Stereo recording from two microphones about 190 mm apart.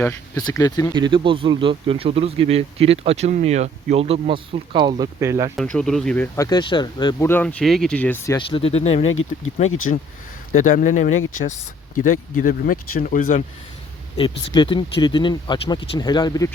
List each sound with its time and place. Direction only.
0.0 s speech: 15° left (ahead or behind)
0.9 s speech: 25° right (ahead or behind)
5.5 s speech: centre (ahead or behind)
6.3 s speech: 20° left (ahead or behind)
7.3 s speech: 10° left (ahead or behind)
8.4 s speech: 25° left (ahead or behind)
9.6 s speech: 90° left
10.5 s speech: 45° left (ahead or behind)
14.2 s speech: 25° left (ahead or behind)